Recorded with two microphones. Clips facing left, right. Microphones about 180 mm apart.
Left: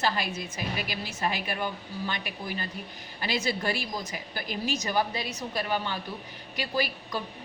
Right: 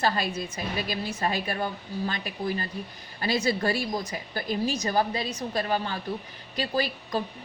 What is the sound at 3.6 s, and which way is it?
A woman's voice, 30° right (ahead or behind).